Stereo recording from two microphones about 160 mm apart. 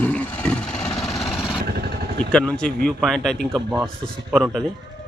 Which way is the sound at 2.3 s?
5° left (ahead or behind).